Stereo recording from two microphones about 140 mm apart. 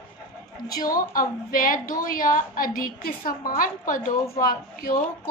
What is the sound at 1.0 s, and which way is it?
A woman's voice, 80° left.